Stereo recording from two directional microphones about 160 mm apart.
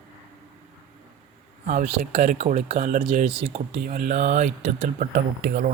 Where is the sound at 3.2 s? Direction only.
35° right (ahead or behind).